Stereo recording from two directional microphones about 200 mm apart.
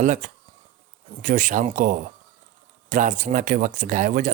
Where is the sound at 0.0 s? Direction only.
40° right (ahead or behind).